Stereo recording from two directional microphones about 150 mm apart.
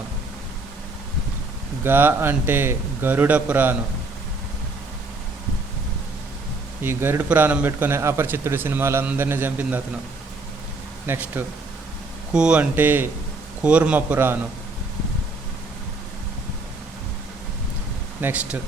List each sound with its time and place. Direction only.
1.8 s a man's voice: 15° right (ahead or behind)
6.8 s a man's voice: 15° right (ahead or behind)
11.0 s a man's voice: 15° right (ahead or behind)
18.2 s a man's voice: 10° right (ahead or behind)